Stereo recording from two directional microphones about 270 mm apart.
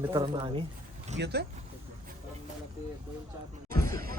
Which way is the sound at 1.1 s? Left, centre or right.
Right.